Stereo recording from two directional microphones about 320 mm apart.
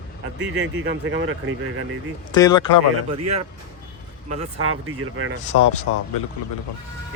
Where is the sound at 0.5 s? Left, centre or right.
Right.